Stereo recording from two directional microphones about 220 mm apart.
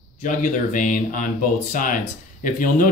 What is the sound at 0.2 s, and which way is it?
Speech, 35° left (ahead or behind).